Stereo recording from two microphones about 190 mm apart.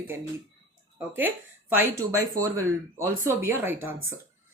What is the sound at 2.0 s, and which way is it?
Speech, 15° right (ahead or behind).